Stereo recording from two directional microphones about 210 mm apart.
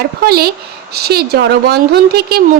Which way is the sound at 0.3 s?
50° right (ahead or behind).